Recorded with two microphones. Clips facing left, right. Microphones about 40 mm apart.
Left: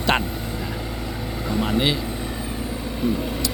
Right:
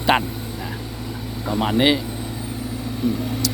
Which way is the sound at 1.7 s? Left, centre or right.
Centre.